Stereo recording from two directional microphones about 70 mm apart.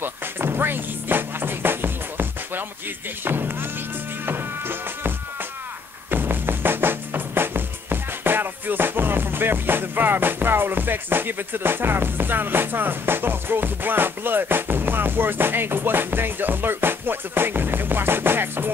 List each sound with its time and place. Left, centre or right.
0.0 s music: right